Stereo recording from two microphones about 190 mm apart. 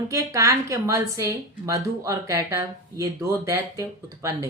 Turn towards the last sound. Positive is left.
turn(degrees=-15)  # may be behind; listen again after turning